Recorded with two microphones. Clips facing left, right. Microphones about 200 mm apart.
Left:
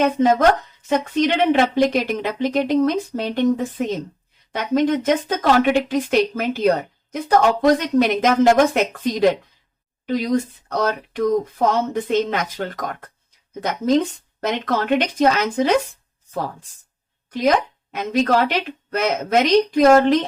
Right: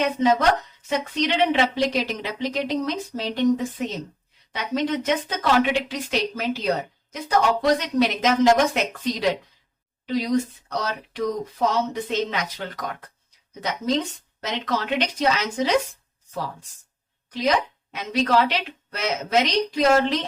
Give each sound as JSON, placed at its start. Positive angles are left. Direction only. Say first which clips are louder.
{"t": 0.0, "sound": "a woman's voice", "louder": "left 4 dB", "side_deg": 50}
{"t": 17.3, "sound": "a woman's voice", "louder": "left 4 dB", "side_deg": 50}